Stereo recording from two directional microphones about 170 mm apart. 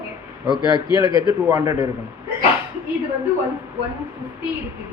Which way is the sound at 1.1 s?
25° right (ahead or behind).